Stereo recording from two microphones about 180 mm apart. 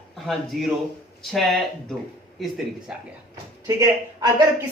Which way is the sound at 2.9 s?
5° right (ahead or behind).